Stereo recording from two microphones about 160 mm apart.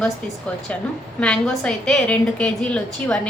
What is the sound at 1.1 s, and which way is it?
A woman's voice, 5° left (ahead or behind).